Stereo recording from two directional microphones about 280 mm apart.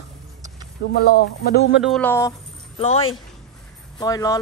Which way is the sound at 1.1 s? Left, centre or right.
Left.